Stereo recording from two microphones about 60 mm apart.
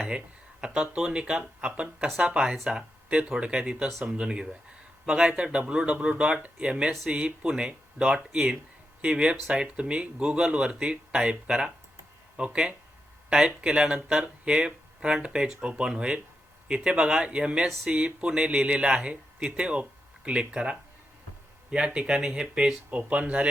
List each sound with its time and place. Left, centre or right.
0.6 s speech: centre
23.0 s speech: right